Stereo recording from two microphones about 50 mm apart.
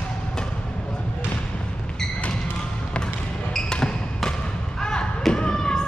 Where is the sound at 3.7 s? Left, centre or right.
Centre.